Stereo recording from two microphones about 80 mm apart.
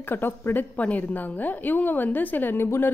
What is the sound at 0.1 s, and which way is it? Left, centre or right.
A woman's voice, left.